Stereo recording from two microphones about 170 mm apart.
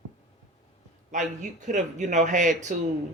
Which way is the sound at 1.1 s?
45° right (ahead or behind).